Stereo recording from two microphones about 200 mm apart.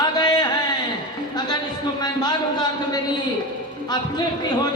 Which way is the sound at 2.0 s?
20° left (ahead or behind).